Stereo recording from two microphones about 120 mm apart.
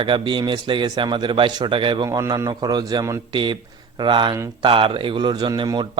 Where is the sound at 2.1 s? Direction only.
30° right (ahead or behind).